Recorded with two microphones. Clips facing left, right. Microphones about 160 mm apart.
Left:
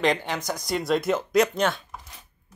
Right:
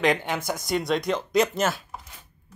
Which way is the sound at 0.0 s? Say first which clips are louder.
Right 1 dB; centre (ahead or behind).